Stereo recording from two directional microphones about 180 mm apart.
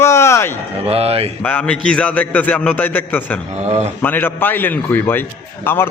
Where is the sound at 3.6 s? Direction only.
40° right (ahead or behind).